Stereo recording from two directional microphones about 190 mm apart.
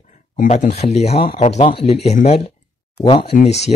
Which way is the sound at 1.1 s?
55° left (ahead or behind).